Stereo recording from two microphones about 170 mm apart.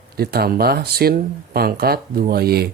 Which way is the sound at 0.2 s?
65° right (ahead or behind).